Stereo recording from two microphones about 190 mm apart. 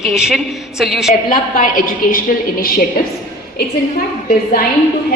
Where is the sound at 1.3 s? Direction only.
45° left (ahead or behind).